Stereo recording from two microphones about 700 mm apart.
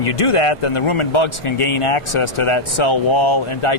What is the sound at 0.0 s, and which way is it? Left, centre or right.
Speech, left.